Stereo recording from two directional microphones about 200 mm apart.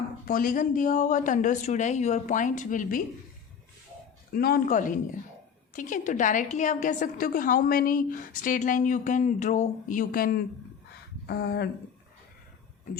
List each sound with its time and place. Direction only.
0.3 s a woman's voice: 45° left (ahead or behind)
4.4 s a woman's voice: 50° left (ahead or behind)